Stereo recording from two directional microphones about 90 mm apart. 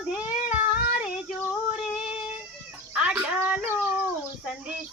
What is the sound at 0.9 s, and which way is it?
Female singing, 10° right (ahead or behind).